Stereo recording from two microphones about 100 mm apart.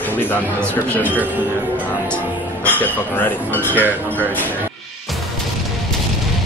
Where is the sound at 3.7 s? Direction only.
20° right (ahead or behind).